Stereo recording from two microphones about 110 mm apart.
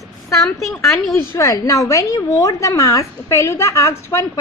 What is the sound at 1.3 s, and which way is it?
A woman's voice, 30° left (ahead or behind).